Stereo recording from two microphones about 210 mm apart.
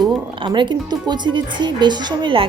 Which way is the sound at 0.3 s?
20° right (ahead or behind).